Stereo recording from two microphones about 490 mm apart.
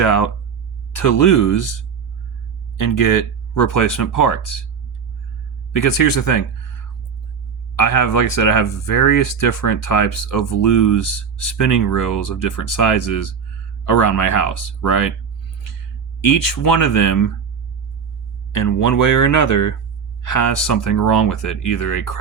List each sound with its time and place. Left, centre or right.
0.0 s speech: left
5.7 s speech: left
7.8 s speech: left
16.2 s speech: left
18.5 s speech: left